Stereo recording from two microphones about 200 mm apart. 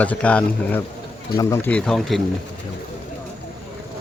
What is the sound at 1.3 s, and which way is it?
Speech, 15° left (ahead or behind).